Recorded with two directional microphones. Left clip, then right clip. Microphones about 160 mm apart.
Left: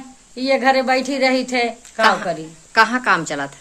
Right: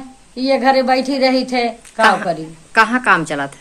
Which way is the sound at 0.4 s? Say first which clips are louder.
Right 2 dB; 15° left (ahead or behind).